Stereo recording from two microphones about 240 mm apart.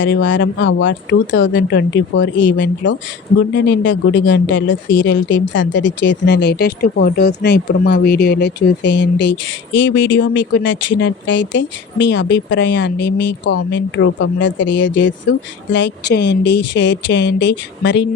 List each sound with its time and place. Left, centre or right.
0.0 s speech: left